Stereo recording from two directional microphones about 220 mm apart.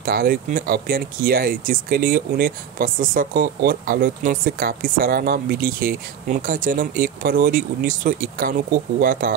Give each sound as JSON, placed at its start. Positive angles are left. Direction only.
{"t": 0.0, "sound": "speech", "side_deg": -40}